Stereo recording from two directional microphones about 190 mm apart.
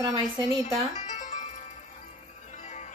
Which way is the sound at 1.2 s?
40° left (ahead or behind).